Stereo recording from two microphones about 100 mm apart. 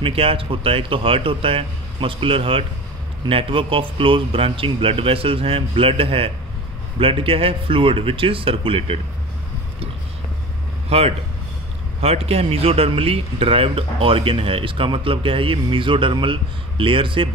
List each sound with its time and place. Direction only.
0.0 s a man's voice: 65° right (ahead or behind)
10.9 s a man's voice: 85° right; by 17.3 s 60° right (ahead or behind)